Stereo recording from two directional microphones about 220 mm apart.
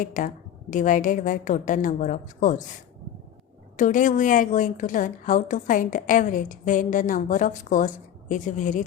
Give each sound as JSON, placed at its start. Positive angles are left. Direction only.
{"t": 0.0, "sound": "a woman's voice", "side_deg": 35}
{"t": 3.8, "sound": "a woman's voice", "side_deg": 35}